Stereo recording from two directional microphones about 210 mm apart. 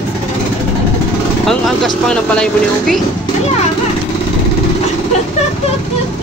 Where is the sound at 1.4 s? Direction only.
Centre (ahead or behind).